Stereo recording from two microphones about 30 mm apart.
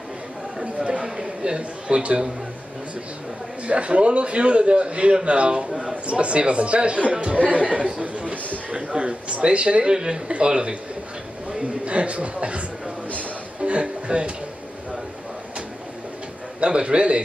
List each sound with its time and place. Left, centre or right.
1.0 s a sound: centre
1.9 s speech: right
3.6 s a man's voice: right
8.7 s a man's voice: right
9.8 s speech: right
10.2 s a man's voice: right
11.8 s speech: right
13.6 s music: right
16.5 s a man's voice: right